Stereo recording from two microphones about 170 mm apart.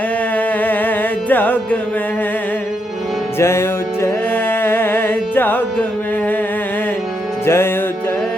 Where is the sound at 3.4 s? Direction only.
15° left (ahead or behind).